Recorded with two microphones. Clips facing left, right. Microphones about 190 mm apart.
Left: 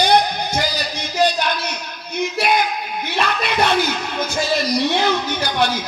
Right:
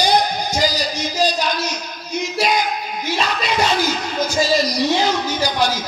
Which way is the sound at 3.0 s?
60° left (ahead or behind).